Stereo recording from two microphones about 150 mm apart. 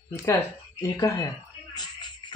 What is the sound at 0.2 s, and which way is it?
Speech, 15° left (ahead or behind).